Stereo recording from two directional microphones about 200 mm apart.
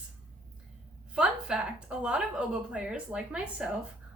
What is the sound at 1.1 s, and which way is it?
A woman's voice, 5° right (ahead or behind).